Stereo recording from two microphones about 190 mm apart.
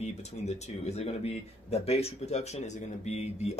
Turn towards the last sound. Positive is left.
turn(degrees=35)  # may be behind; listen again after turning